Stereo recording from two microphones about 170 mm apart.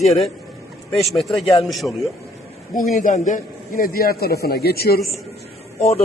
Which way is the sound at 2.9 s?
50° left (ahead or behind).